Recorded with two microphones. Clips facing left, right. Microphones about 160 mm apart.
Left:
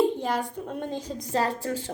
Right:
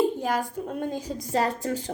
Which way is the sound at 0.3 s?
45° right (ahead or behind).